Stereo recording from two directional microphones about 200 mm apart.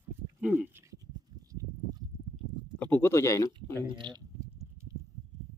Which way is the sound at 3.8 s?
25° right (ahead or behind).